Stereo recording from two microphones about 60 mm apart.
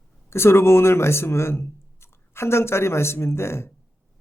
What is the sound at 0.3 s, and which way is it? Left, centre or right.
A man's voice, left.